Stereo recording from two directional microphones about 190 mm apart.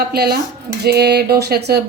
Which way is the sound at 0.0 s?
55° right (ahead or behind).